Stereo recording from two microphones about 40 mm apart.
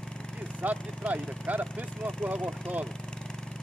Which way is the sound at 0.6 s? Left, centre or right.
Right.